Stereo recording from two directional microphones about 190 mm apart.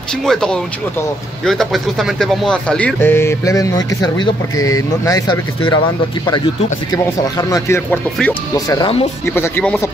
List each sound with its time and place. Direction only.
0.2 s speech: 5° left (ahead or behind); by 5.8 s 25° left (ahead or behind)
6.9 s speech: 20° left (ahead or behind)
8.6 s speech: 20° left (ahead or behind)